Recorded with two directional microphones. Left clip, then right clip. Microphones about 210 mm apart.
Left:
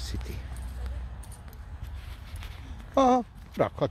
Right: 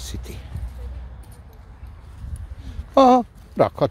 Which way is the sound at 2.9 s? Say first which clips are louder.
Right 9 dB; 35° right (ahead or behind).